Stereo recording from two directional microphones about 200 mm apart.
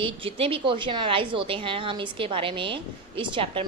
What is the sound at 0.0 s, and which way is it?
A woman's voice, 25° right (ahead or behind).